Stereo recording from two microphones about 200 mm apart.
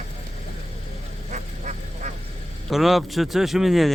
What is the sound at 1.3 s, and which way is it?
Honk, 35° right (ahead or behind).